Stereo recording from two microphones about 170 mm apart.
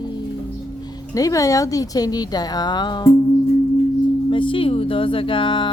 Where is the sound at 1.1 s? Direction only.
20° left (ahead or behind).